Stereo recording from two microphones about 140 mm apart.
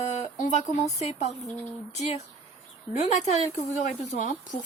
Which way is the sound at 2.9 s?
55° left (ahead or behind).